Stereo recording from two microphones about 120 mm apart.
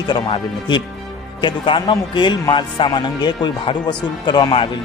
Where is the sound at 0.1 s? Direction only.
40° left (ahead or behind).